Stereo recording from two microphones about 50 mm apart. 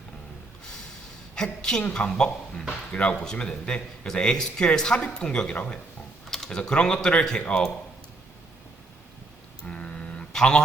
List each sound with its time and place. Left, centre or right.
1.4 s speech: centre
6.3 s computer keyboard: centre
6.6 s speech: centre
9.6 s a sound: left
10.3 s speech: centre